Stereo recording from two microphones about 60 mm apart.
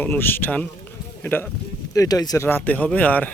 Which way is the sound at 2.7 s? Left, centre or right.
Left.